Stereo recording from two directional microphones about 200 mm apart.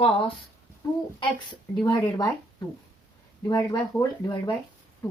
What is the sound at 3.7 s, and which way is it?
Speech, 20° left (ahead or behind).